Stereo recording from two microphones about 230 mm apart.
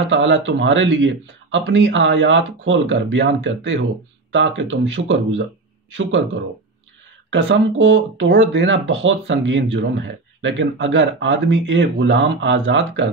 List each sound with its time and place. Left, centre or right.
0.1 s a man's voice: right
7.2 s speech: right